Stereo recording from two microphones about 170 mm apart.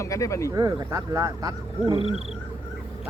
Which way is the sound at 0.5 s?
20° right (ahead or behind).